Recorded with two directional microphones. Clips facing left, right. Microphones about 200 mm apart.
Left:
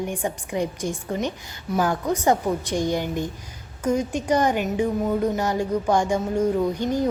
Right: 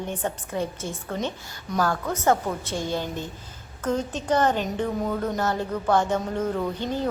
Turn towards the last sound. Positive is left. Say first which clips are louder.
# left 5 dB
turn(degrees=15)  # may be behind; listen again after turning